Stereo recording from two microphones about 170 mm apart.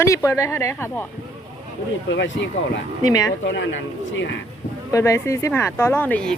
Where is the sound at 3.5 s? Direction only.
90° left.